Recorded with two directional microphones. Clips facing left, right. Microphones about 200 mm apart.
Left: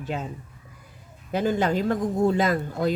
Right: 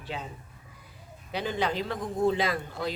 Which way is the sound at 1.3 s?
45° left (ahead or behind).